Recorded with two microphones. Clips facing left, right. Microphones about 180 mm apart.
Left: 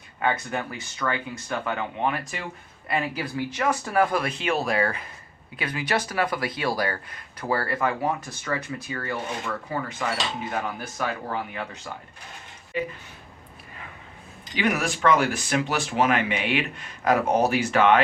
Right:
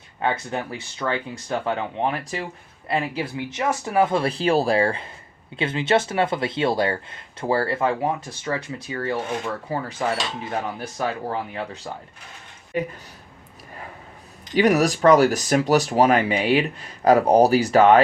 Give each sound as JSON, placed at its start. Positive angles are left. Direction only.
{"t": 0.2, "sound": "speech", "side_deg": -25}
{"t": 12.7, "sound": "speech", "side_deg": -45}
{"t": 14.5, "sound": "speech", "side_deg": -40}